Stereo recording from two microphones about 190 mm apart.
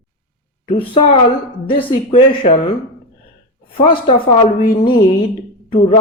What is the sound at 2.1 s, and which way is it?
Speech, 35° left (ahead or behind).